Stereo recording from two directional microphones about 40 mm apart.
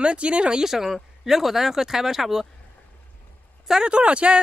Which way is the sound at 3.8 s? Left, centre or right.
Right.